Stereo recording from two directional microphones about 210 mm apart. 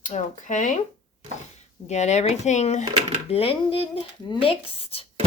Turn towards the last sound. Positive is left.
turn(degrees=25)  # may be behind; listen again after turning